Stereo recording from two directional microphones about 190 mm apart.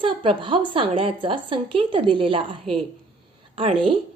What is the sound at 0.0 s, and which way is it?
A woman's voice, 25° right (ahead or behind).